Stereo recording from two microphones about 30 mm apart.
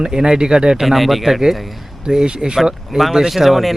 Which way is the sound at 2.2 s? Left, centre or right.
Right.